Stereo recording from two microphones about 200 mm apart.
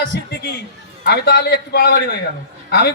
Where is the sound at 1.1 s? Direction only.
50° left (ahead or behind).